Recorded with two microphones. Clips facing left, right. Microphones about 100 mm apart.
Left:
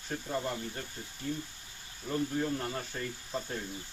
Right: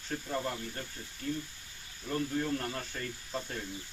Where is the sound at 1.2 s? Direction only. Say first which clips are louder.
Right 1 dB; 20° left (ahead or behind).